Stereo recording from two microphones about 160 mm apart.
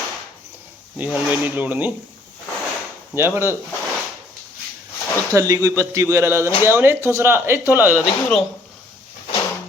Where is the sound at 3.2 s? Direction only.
15° right (ahead or behind).